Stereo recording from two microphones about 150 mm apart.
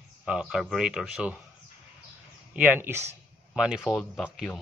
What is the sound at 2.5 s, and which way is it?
Speech, 15° right (ahead or behind).